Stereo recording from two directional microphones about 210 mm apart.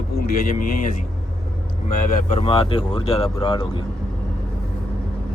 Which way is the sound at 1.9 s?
35° left (ahead or behind).